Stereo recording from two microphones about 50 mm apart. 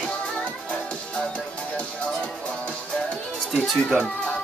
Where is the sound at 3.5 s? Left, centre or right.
Centre.